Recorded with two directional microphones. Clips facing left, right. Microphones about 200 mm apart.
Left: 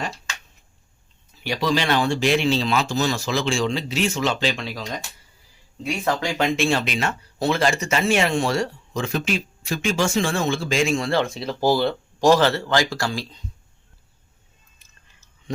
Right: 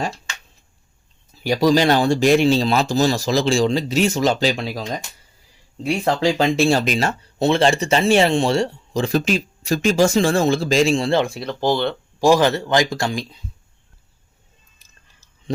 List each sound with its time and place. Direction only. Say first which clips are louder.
1.5 s speech: right 7 dB; 40° right (ahead or behind)
11.3 s speech: even; 5° left (ahead or behind)
12.2 s speech: right 2 dB; 15° right (ahead or behind)
14.8 s a sound: right 1 dB; 35° right (ahead or behind)